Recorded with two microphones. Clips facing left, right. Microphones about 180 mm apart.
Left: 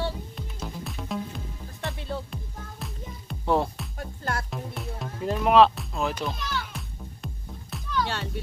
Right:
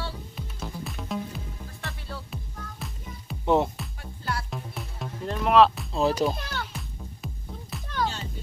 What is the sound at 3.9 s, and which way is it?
Music, 45° left (ahead or behind).